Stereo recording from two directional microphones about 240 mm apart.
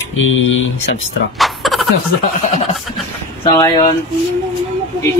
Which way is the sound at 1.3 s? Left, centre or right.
Centre.